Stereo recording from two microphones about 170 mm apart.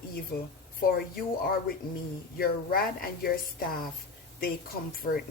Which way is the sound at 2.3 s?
60° left (ahead or behind).